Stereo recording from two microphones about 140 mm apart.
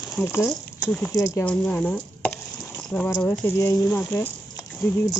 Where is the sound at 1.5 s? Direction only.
10° left (ahead or behind).